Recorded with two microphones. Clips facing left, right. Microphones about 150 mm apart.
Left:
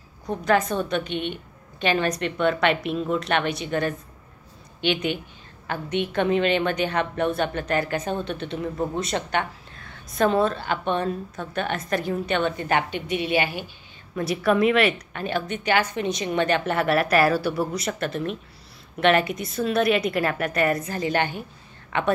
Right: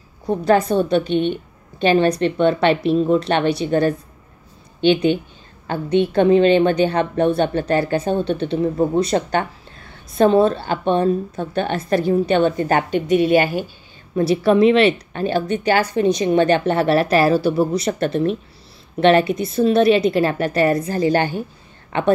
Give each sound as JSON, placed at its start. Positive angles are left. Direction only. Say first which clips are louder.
{"t": 0.3, "sound": "a woman's voice", "louder": "right 6 dB", "side_deg": -30}
{"t": 14.1, "sound": "a woman's voice", "louder": "right 7 dB", "side_deg": -30}